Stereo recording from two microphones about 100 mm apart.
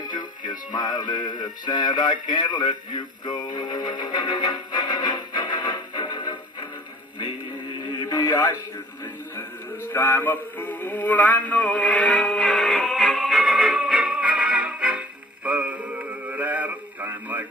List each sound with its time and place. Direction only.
0.0 s music: 45° left (ahead or behind)
9.9 s music: 20° left (ahead or behind); by 17.5 s 15° right (ahead or behind)